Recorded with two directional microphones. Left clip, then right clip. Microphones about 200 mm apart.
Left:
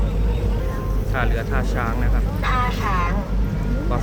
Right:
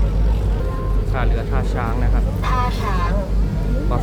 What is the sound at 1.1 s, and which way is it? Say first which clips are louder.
Speech: left 1 dB; centre (ahead or behind).